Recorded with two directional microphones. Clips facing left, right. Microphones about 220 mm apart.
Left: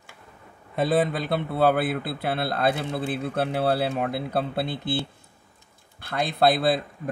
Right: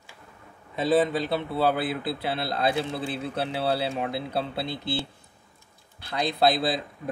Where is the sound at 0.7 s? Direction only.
55° left (ahead or behind).